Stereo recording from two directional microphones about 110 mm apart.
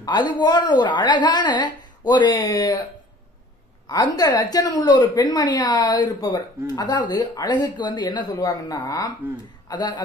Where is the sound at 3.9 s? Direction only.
35° left (ahead or behind).